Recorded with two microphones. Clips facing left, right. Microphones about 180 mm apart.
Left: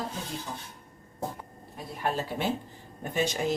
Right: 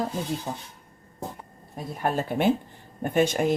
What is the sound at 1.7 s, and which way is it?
Speech, 45° right (ahead or behind).